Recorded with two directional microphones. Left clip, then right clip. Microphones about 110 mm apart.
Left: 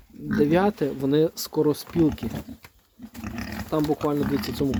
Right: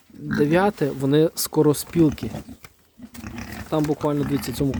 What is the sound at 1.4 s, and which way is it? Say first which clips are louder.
Speech: right 4 dB; 85° right.